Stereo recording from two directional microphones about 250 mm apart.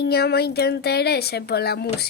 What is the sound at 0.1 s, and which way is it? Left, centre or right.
Speech, left.